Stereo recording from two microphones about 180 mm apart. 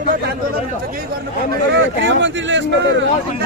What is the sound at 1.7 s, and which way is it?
Speech, 90° right.